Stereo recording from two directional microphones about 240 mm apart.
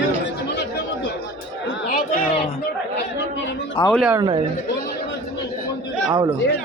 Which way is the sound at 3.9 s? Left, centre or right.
Centre.